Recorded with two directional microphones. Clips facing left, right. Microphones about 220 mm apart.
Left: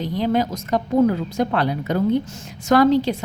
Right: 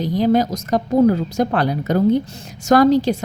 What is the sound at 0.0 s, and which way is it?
A woman's voice, 40° right (ahead or behind).